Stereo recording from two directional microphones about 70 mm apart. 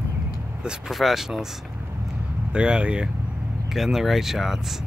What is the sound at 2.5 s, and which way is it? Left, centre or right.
Speech, centre.